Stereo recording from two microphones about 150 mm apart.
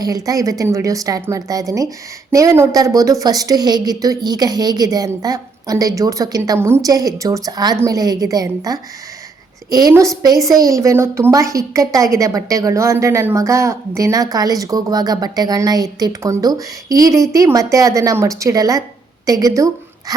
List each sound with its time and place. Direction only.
0.0 s a woman's voice: 25° right (ahead or behind)